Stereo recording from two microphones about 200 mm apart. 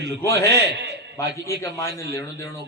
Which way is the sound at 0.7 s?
60° right (ahead or behind).